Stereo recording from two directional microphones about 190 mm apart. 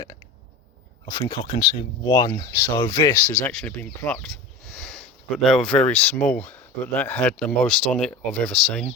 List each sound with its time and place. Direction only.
1.1 s speech: 25° left (ahead or behind)
3.1 s speech: 10° left (ahead or behind)